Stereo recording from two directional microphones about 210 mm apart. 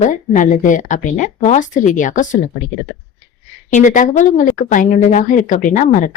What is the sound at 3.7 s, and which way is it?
A woman's voice, 35° left (ahead or behind).